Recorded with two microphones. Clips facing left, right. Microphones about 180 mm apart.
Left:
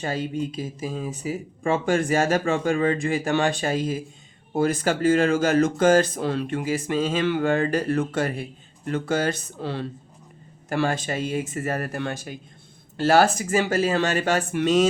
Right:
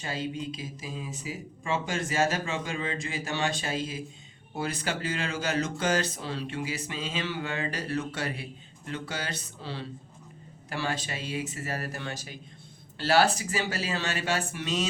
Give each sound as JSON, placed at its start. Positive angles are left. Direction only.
{"t": 0.0, "sound": "speech", "side_deg": 50}